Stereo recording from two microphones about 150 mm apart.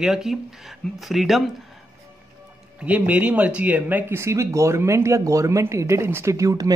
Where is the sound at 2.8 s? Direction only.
10° right (ahead or behind).